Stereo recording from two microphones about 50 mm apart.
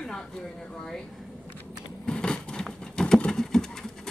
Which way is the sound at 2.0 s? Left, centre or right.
Centre.